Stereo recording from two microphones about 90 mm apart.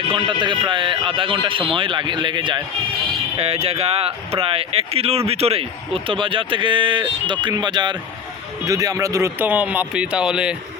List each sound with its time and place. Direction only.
0.2 s speech: 65° right (ahead or behind)
3.3 s speech: 90° right; by 7.9 s 55° right (ahead or behind)
8.6 s speech: 40° right (ahead or behind)
9.4 s speech: 20° right (ahead or behind)